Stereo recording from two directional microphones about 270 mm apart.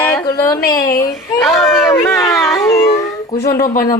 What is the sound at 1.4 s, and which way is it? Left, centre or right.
Speech, centre.